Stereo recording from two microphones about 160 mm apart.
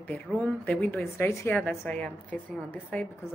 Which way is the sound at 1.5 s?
5° left (ahead or behind).